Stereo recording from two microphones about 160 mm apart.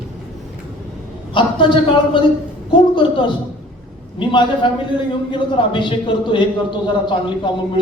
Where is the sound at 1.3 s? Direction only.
30° left (ahead or behind).